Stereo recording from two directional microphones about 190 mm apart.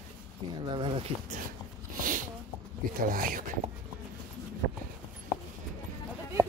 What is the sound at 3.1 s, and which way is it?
Speech, 45° right (ahead or behind).